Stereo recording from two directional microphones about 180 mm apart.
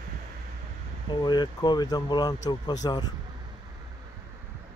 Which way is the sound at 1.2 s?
25° left (ahead or behind).